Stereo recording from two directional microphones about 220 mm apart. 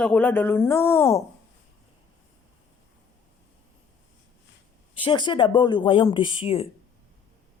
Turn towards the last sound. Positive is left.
turn(degrees=25)  # may be behind; listen again after turning